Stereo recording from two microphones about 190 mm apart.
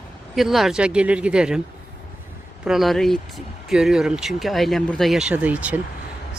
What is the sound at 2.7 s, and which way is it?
Speech, centre (ahead or behind).